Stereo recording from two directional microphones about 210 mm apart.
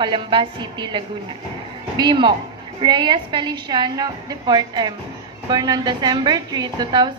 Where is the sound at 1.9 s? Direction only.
20° right (ahead or behind).